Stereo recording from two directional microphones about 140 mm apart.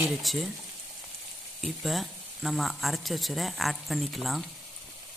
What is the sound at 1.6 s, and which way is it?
Speech, centre (ahead or behind).